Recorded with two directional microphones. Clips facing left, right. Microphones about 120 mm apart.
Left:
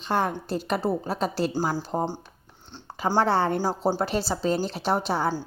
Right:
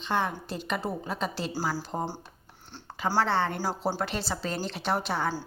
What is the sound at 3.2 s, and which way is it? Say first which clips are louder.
Speech: left 4 dB; 40° left (ahead or behind).